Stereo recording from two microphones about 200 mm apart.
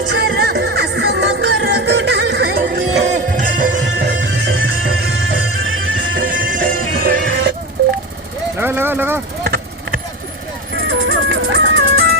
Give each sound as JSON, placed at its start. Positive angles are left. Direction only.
{"t": 0.3, "sound": "music", "side_deg": -55}
{"t": 3.0, "sound": "music", "side_deg": -35}
{"t": 4.0, "sound": "music", "side_deg": -60}
{"t": 5.2, "sound": "music", "side_deg": -70}
{"t": 6.4, "sound": "music", "side_deg": -40}
{"t": 8.5, "sound": "vehicle", "side_deg": -10}
{"t": 9.4, "sound": "vehicle", "side_deg": -50}
{"t": 10.8, "sound": "music", "side_deg": -70}